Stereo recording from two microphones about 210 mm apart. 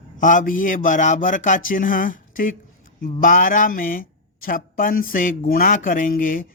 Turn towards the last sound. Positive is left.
turn(degrees=40)  # may be behind; listen again after turning